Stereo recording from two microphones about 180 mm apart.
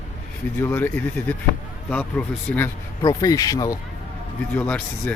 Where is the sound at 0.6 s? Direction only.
10° left (ahead or behind).